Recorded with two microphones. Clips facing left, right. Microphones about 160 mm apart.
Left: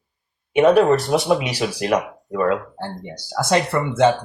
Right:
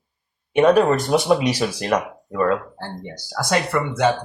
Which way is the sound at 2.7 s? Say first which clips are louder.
Left 2 dB; 20° left (ahead or behind).